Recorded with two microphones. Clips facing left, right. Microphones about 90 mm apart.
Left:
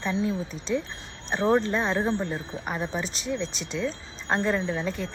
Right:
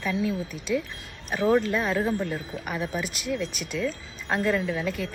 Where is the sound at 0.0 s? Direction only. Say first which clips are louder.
Even; 25° left (ahead or behind).